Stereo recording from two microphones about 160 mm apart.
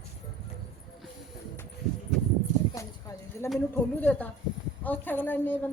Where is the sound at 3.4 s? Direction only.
15° left (ahead or behind).